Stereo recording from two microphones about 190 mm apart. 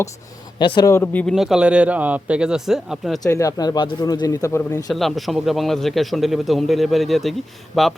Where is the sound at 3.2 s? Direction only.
15° left (ahead or behind).